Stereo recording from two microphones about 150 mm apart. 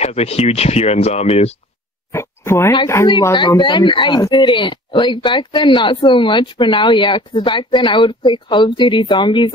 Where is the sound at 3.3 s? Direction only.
30° left (ahead or behind).